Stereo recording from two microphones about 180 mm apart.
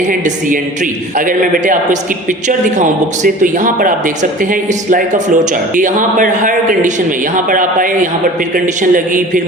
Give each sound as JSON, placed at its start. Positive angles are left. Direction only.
{"t": 0.0, "sound": "speech", "side_deg": -50}